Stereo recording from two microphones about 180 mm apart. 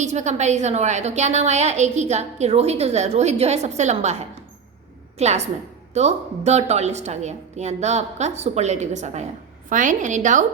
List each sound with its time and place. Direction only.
0.0 s a woman's voice: 40° right (ahead or behind)